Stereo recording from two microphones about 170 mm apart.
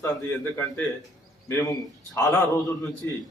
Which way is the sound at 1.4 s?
15° left (ahead or behind).